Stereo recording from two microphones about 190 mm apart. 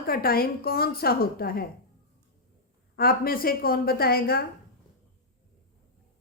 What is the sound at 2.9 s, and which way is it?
A woman's voice, 50° left (ahead or behind).